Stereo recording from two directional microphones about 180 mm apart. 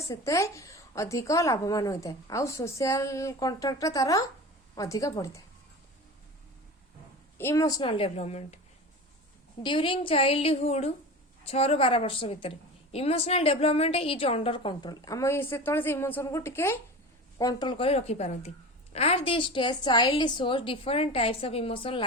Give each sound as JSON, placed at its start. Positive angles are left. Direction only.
{"t": 0.1, "sound": "a woman's voice", "side_deg": 15}
{"t": 7.3, "sound": "a woman's voice", "side_deg": 15}
{"t": 9.6, "sound": "a woman's voice", "side_deg": 30}